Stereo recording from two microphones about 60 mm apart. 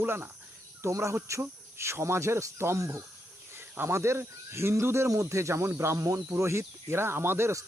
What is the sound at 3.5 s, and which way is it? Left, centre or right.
Speech, right.